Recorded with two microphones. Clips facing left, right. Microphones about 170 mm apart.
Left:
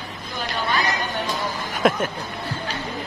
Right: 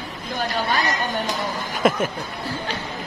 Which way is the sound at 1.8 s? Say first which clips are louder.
Even; centre (ahead or behind).